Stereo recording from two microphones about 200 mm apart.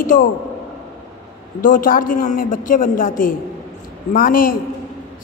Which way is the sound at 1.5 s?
45° left (ahead or behind).